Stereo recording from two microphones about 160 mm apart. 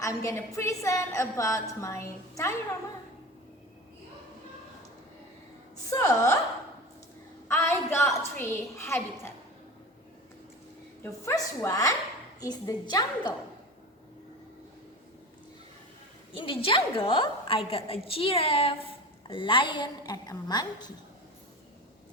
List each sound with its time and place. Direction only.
0.0 s a woman's voice: 20° left (ahead or behind)
5.9 s a woman's voice: 20° left (ahead or behind)
7.4 s a woman's voice: 15° left (ahead or behind)
11.0 s a woman's voice: 15° left (ahead or behind)
16.3 s a woman's voice: 35° left (ahead or behind)